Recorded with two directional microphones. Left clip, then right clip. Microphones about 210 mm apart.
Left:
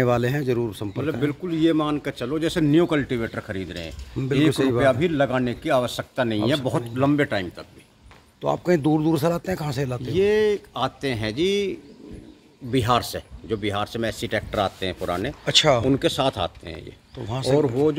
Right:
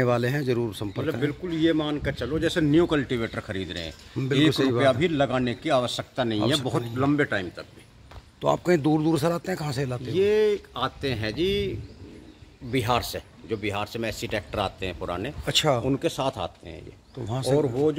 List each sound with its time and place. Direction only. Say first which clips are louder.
0.0 s speech: left 2 dB; 10° left (ahead or behind)
1.2 s speech: left 3 dB; 55° left (ahead or behind)
2.9 s speech: left 2 dB; 20° left (ahead or behind)
7.0 s speech: left 3 dB; 50° left (ahead or behind)
8.4 s speech: left 1 dB; centre (ahead or behind)
10.1 s speech: left 2 dB; 50° left (ahead or behind)
12.7 s speech: left 4 dB; 45° left (ahead or behind)
15.4 s speech: left 5 dB; centre (ahead or behind)
15.8 s speech: left 5 dB; 40° left (ahead or behind)
17.2 s speech: left 3 dB; 10° right (ahead or behind)